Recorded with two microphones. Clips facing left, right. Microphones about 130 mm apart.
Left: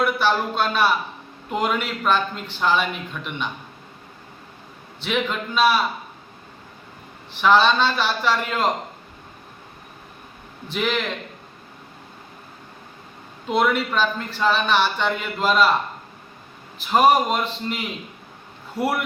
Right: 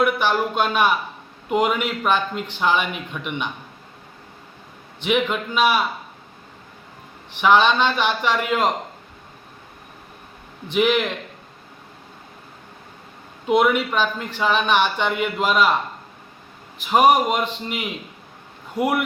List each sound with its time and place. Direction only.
0.0 s speech: 15° right (ahead or behind)
5.0 s speech: 15° right (ahead or behind)
7.3 s speech: 15° right (ahead or behind)
10.7 s speech: 15° right (ahead or behind)
13.5 s speech: 15° right (ahead or behind)
16.7 s speech: 15° right (ahead or behind)